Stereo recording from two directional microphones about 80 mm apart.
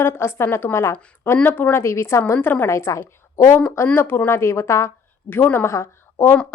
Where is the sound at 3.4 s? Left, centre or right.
Left.